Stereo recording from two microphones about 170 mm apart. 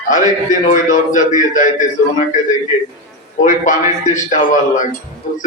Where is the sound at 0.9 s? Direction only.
50° left (ahead or behind).